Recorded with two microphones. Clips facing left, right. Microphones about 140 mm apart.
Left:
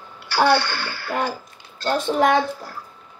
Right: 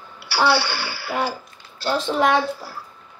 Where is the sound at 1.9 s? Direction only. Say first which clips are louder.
Left 1 dB; 50° left (ahead or behind).